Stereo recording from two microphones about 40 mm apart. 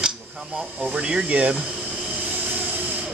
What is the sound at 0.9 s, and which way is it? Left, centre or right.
Speech, right.